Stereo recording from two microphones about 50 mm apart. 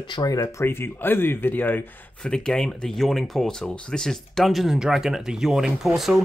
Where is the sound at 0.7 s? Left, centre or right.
Left.